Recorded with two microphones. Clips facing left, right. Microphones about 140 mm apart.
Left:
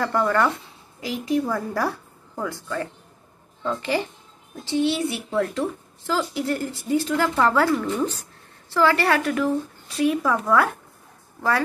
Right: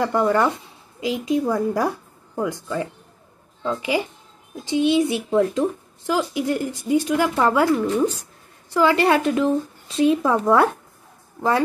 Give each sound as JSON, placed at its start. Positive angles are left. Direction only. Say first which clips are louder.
{"t": 0.0, "sound": "speech", "louder": "right 2 dB", "side_deg": -20}